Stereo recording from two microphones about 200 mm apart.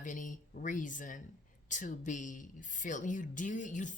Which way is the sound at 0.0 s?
40° left (ahead or behind).